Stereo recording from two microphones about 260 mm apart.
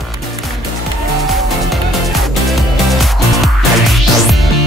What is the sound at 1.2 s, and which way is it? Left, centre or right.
Music, centre.